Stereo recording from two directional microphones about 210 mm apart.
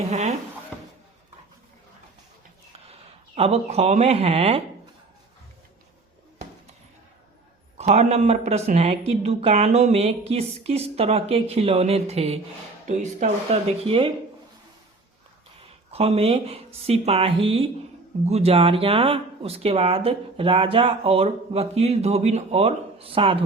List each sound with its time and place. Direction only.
0.0 s speech: 30° right (ahead or behind)
3.3 s speech: 30° right (ahead or behind)
7.8 s speech: 30° right (ahead or behind)
15.9 s speech: 30° right (ahead or behind)